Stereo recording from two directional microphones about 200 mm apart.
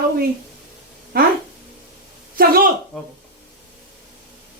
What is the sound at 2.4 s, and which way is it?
Speech, 45° right (ahead or behind).